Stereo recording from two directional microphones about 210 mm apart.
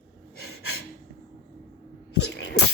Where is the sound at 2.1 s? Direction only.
55° left (ahead or behind).